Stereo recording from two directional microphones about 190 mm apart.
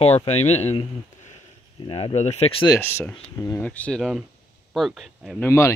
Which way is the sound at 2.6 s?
15° left (ahead or behind).